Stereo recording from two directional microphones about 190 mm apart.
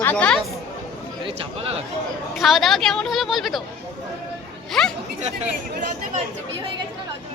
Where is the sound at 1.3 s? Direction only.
30° right (ahead or behind).